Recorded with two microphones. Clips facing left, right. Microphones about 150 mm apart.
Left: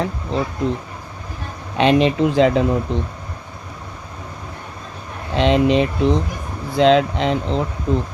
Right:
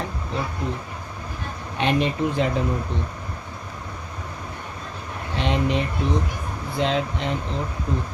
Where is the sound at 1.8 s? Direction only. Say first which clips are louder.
Left 7 dB; 90° left.